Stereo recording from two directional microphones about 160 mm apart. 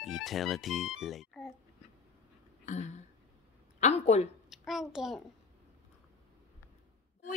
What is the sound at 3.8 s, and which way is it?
Speech, 40° left (ahead or behind).